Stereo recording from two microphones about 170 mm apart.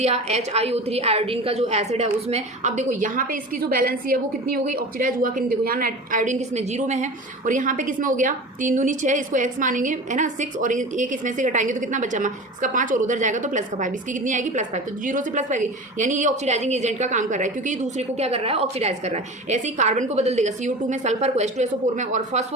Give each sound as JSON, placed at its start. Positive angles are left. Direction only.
{"t": 0.0, "sound": "a woman's voice", "side_deg": -40}